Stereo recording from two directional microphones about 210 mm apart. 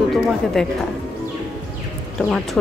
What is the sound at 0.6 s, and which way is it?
Speech, centre (ahead or behind).